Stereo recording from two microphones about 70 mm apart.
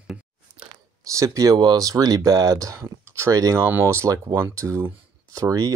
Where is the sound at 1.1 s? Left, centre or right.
Right.